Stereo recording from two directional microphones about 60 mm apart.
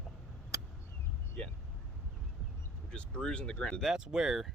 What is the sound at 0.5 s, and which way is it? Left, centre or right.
Vehicle, right.